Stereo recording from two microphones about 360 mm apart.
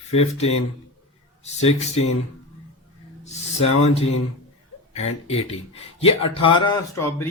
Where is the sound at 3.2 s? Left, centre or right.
Centre.